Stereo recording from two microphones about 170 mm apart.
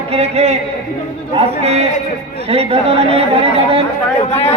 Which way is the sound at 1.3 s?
40° right (ahead or behind).